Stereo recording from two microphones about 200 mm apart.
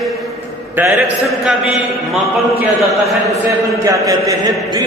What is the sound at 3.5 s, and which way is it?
A man's voice, 15° right (ahead or behind).